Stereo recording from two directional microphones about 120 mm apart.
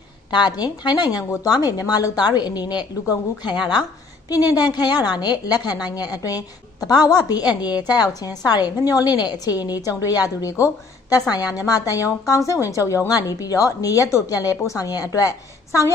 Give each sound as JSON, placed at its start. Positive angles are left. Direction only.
{"t": 0.3, "sound": "a woman's voice", "side_deg": 35}